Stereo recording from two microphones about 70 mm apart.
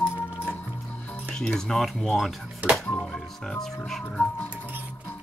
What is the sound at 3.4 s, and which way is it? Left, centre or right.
Speech, centre.